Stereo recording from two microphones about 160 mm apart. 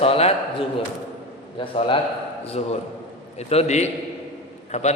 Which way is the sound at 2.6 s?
45° left (ahead or behind).